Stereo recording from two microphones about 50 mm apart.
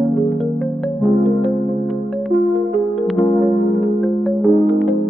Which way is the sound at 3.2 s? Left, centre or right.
Centre.